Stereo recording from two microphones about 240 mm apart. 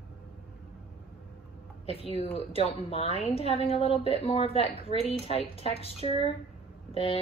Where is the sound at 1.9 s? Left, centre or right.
Left.